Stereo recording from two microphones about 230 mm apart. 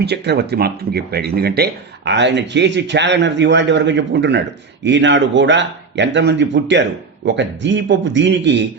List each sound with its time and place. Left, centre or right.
0.0 s speech: right